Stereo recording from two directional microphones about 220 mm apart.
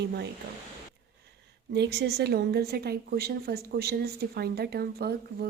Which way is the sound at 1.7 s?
50° right (ahead or behind).